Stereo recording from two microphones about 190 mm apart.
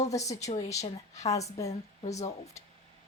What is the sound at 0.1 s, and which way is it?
Speech, 15° left (ahead or behind).